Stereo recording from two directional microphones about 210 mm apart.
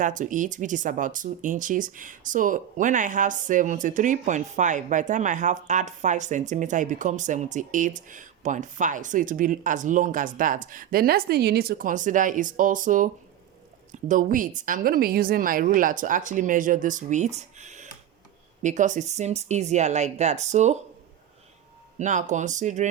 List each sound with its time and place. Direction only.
0.0 s speech: 40° right (ahead or behind)
21.9 s speech: 35° right (ahead or behind)